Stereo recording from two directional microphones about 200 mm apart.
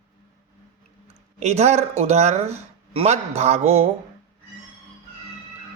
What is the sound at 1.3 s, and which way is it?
Speech, 35° right (ahead or behind).